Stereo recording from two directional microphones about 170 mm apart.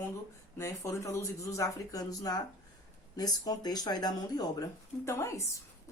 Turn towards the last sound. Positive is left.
turn(degrees=15)  # may be behind; listen again after turning